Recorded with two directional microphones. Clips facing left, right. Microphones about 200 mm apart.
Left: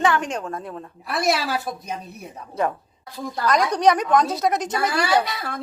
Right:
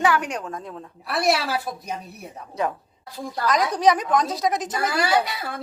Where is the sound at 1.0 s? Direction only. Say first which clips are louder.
Even; centre (ahead or behind).